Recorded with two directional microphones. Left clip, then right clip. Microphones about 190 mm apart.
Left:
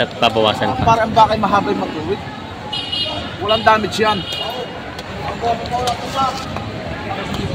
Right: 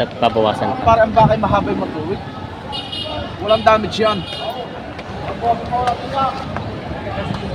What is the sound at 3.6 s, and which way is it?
Speech, 40° right (ahead or behind).